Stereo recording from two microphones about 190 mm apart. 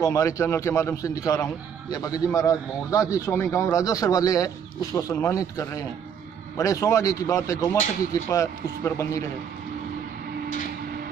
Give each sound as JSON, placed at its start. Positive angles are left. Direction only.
{"t": 0.1, "sound": "a man's voice", "side_deg": 15}